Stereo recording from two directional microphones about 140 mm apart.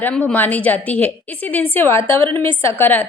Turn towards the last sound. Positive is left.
turn(degrees=15)  # may be behind; listen again after turning